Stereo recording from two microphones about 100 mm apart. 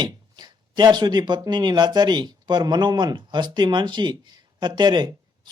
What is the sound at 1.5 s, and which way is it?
Speech, 45° right (ahead or behind).